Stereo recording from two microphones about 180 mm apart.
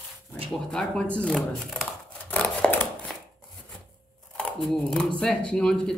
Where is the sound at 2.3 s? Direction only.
10° left (ahead or behind).